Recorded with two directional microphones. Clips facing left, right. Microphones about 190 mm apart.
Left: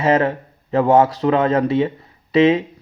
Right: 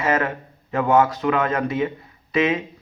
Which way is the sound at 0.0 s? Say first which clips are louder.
Left 5 dB; 30° left (ahead or behind).